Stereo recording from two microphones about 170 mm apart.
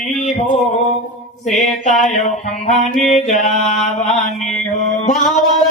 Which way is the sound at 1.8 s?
45° left (ahead or behind).